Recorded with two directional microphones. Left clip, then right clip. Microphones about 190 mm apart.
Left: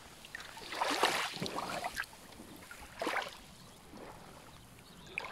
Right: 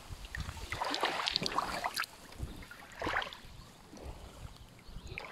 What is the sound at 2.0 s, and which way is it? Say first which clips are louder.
Boat: right 3 dB; 15° right (ahead or behind).